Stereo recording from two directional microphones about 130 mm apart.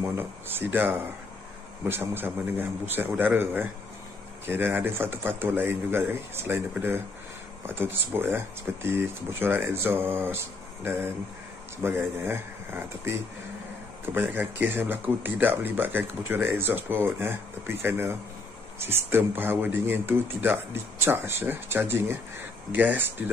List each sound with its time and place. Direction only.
0.0 s speech: 20° right (ahead or behind)